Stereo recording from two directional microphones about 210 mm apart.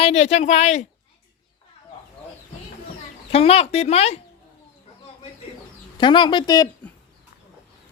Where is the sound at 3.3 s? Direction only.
30° left (ahead or behind).